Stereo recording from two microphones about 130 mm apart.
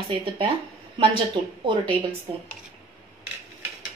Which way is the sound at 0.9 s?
40° right (ahead or behind).